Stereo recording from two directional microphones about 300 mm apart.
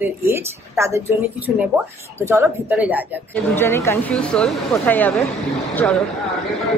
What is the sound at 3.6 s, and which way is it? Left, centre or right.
Speech, centre.